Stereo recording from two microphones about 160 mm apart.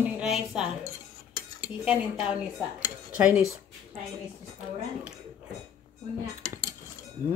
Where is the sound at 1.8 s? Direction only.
5° right (ahead or behind).